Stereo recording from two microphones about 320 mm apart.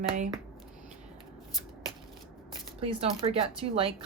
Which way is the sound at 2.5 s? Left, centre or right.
Centre.